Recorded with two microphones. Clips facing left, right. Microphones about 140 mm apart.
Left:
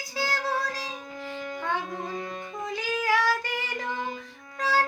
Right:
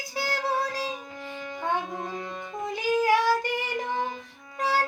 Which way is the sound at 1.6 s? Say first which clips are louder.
Right 3 dB; 15° right (ahead or behind).